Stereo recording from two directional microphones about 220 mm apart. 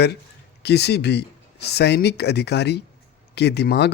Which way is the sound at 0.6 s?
50° left (ahead or behind).